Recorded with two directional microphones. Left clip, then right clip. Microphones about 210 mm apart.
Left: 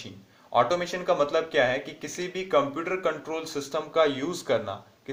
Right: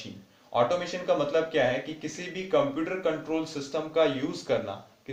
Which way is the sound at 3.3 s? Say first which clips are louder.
Even; 35° left (ahead or behind).